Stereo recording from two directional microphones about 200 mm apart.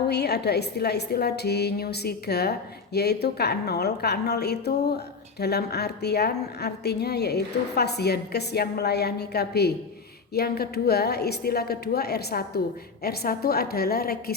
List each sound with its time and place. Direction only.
0.1 s a woman's voice: 55° left (ahead or behind)